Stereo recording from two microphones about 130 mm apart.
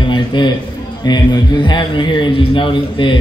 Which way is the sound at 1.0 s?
30° left (ahead or behind).